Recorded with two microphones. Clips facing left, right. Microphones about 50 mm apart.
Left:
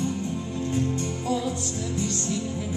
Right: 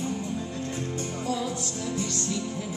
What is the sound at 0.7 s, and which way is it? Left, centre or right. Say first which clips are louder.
Music: left 5 dB; left.